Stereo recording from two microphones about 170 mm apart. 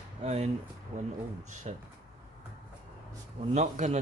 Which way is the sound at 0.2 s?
40° right (ahead or behind).